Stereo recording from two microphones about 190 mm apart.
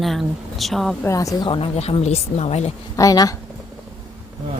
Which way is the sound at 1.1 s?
15° left (ahead or behind).